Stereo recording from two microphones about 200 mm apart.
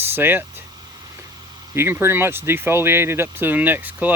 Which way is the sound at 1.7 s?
10° right (ahead or behind).